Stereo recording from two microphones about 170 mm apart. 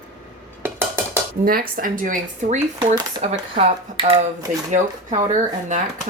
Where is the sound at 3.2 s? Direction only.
40° right (ahead or behind).